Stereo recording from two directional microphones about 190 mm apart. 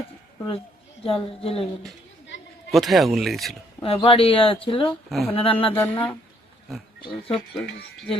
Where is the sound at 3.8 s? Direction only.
30° left (ahead or behind).